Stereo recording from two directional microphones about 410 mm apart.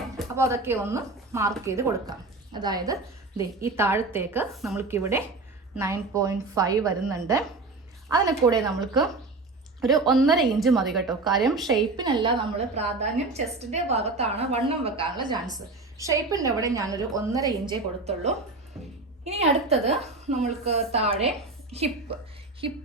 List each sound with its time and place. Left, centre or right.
0.2 s a woman's voice: centre
11.8 s a woman's voice: centre